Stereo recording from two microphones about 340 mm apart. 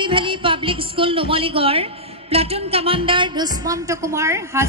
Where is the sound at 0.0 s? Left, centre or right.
Centre.